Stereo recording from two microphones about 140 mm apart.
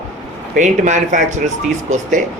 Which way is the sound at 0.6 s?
60° right (ahead or behind).